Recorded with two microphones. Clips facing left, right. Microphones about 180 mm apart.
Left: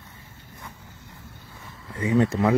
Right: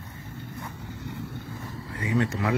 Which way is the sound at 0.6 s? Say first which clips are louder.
Right 7 dB; 75° right (ahead or behind).